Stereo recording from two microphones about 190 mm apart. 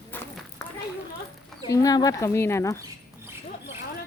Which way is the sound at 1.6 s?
20° left (ahead or behind).